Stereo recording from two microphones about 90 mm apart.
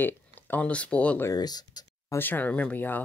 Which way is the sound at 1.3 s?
50° left (ahead or behind).